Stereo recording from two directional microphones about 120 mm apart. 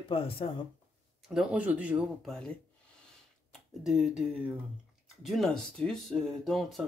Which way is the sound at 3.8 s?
Centre (ahead or behind).